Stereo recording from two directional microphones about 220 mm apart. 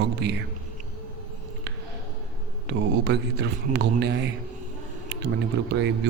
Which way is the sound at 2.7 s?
50° right (ahead or behind).